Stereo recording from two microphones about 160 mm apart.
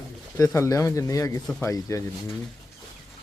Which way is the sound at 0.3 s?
20° left (ahead or behind).